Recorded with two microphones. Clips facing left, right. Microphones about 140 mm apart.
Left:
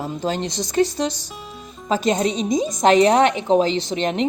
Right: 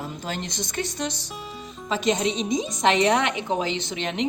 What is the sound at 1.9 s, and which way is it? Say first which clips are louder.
A woman's voice: left 4 dB; 45° left (ahead or behind).